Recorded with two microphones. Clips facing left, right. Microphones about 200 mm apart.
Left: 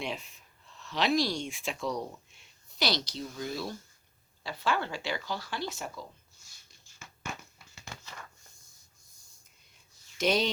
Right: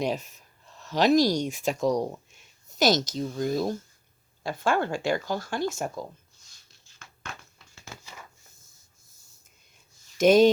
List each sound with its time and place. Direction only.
0.0 s speech: 45° right (ahead or behind)
8.0 s a sound: 10° right (ahead or behind)
10.1 s speech: 50° right (ahead or behind)